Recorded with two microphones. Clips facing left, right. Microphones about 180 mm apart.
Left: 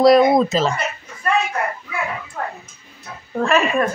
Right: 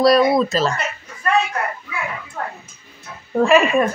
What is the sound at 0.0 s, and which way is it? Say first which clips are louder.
Speech: left 2 dB; 20° left (ahead or behind).